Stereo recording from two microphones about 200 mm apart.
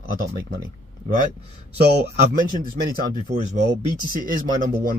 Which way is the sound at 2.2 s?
45° right (ahead or behind).